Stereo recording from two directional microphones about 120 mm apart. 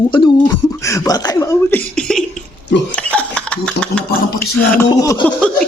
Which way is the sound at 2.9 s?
10° left (ahead or behind).